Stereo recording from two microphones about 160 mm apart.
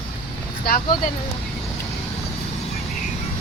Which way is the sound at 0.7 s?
75° left (ahead or behind).